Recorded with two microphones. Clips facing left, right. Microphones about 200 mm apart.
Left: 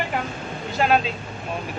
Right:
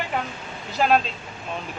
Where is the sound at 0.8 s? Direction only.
Centre (ahead or behind).